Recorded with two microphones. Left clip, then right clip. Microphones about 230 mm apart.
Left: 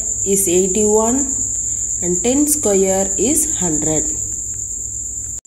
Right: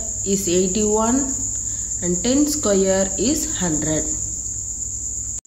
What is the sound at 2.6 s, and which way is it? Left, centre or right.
Speech, centre.